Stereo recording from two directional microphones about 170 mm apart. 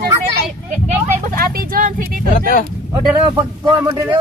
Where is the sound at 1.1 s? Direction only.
55° right (ahead or behind).